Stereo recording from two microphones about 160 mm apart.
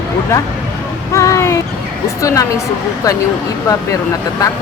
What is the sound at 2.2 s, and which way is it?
Speech, 20° left (ahead or behind).